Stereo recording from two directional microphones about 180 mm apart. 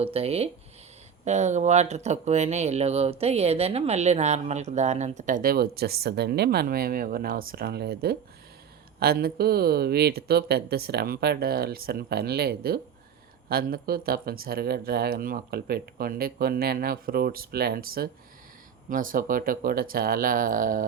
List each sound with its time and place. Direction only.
0.0 s speech: 35° right (ahead or behind); by 20.8 s 50° right (ahead or behind)